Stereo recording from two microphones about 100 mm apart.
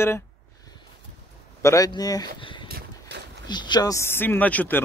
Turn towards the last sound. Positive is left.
turn(degrees=15)  # may be behind; listen again after turning